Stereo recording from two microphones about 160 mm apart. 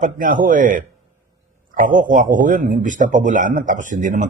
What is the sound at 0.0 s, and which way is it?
Speech, 55° right (ahead or behind).